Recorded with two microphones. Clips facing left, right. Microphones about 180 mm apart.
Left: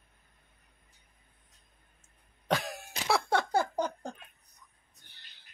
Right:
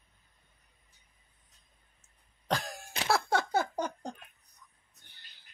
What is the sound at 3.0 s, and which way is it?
Music, centre (ahead or behind).